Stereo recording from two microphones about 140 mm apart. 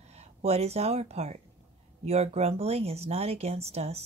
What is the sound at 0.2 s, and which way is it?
Speech, 50° right (ahead or behind).